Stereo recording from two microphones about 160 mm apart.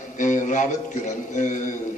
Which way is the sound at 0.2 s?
50° left (ahead or behind).